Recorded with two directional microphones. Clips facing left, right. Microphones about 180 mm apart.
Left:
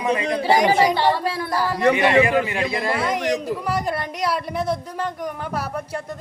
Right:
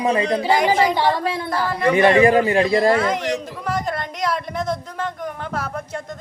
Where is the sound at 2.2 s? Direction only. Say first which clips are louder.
Right 4 dB; 40° right (ahead or behind).